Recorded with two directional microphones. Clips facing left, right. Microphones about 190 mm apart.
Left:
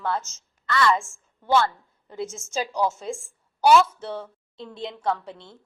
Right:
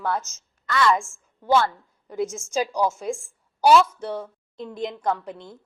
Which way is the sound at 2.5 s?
10° right (ahead or behind).